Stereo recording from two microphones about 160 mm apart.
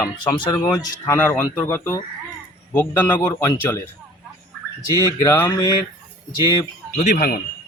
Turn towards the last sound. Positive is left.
turn(degrees=50)  # may be behind; listen again after turning